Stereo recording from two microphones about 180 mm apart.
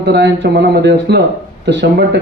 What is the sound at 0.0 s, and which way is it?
A man's voice, 70° right (ahead or behind).